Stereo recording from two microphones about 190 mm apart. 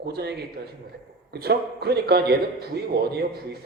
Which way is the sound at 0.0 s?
60° right (ahead or behind).